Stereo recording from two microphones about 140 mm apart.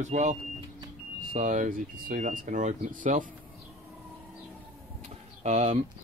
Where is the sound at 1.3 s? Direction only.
65° right (ahead or behind).